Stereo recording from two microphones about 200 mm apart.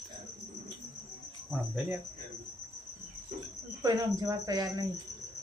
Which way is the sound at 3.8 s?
20° right (ahead or behind).